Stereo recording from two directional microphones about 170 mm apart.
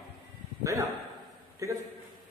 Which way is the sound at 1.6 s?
20° right (ahead or behind).